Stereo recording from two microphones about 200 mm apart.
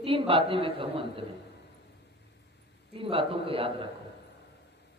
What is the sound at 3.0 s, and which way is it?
Speech, 25° right (ahead or behind).